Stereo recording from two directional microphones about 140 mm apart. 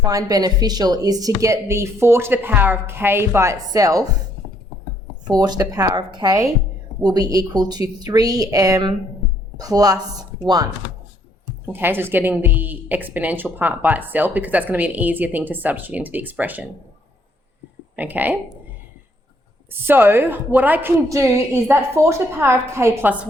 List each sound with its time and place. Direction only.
0.0 s speech: 25° right (ahead or behind)
5.3 s speech: 30° right (ahead or behind)
11.6 s a woman's voice: 15° right (ahead or behind)
17.9 s speech: 10° right (ahead or behind)
19.8 s a woman's voice: 15° right (ahead or behind)